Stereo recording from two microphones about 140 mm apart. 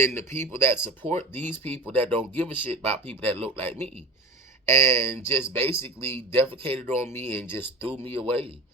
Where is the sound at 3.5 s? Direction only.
15° left (ahead or behind).